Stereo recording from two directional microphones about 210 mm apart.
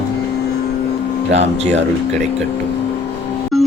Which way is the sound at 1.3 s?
30° right (ahead or behind).